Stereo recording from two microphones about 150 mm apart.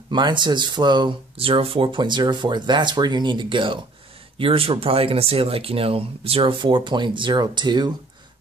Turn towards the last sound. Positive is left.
turn(degrees=-30)  # may be behind; listen again after turning